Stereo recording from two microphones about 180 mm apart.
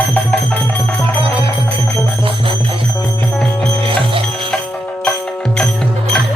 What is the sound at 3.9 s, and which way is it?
Music, 30° right (ahead or behind).